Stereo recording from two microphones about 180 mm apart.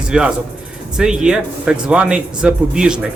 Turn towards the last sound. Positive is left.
turn(degrees=-5)  # may be behind; listen again after turning